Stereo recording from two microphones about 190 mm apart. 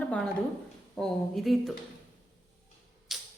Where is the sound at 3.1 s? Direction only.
Centre (ahead or behind).